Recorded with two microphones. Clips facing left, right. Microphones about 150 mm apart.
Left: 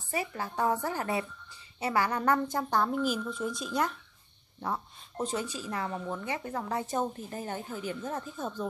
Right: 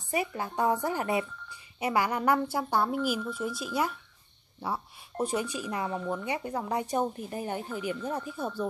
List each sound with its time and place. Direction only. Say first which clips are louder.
0.1 s speech: right 3 dB; 15° right (ahead or behind)